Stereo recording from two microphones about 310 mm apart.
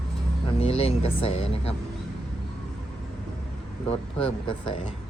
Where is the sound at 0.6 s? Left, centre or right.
Centre.